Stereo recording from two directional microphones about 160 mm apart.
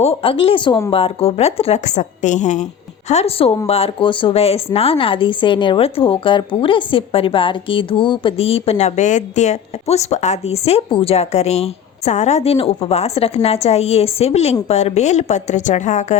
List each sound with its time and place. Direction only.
0.0 s a woman's voice: 35° left (ahead or behind)